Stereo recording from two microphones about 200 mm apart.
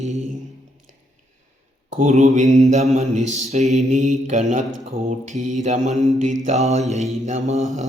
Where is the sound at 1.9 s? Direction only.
35° right (ahead or behind).